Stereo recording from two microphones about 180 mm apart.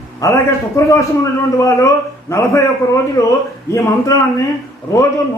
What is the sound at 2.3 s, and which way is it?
A man's voice, 15° left (ahead or behind).